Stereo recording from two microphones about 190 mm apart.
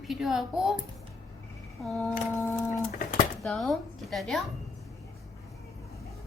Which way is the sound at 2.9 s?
45° left (ahead or behind).